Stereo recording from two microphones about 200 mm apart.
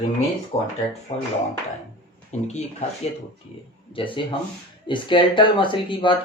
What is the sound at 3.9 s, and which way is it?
Speech, 25° left (ahead or behind).